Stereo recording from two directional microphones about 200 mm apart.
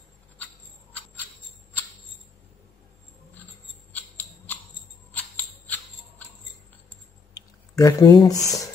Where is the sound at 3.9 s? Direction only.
10° left (ahead or behind).